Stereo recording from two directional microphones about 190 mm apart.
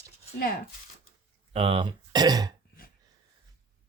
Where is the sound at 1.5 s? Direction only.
30° right (ahead or behind).